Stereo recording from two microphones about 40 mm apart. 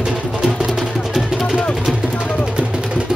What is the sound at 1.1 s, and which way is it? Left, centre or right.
Music, centre.